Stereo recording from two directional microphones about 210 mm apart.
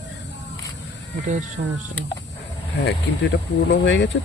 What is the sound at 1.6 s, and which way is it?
Speech, 35° right (ahead or behind).